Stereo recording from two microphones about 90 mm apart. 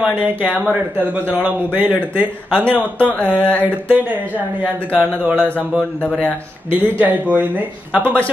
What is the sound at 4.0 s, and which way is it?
Speech, 20° right (ahead or behind).